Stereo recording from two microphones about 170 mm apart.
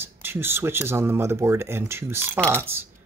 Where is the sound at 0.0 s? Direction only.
15° right (ahead or behind).